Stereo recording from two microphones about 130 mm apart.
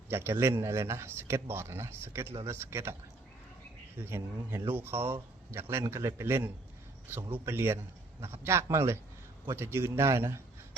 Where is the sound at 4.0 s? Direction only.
20° right (ahead or behind).